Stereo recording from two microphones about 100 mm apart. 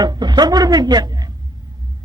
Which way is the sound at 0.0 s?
45° right (ahead or behind).